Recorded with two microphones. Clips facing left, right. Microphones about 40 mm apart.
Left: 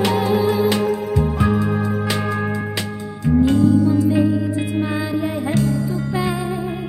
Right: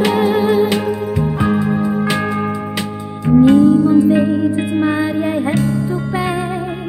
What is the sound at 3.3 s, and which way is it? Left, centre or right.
Music, right.